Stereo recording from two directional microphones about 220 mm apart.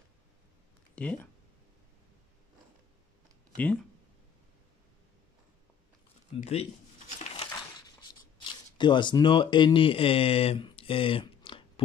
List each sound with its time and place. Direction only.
0.9 s speech: 5° left (ahead or behind)
3.5 s speech: 5° left (ahead or behind)
6.3 s speech: 30° left (ahead or behind)
8.7 s speech: 20° left (ahead or behind)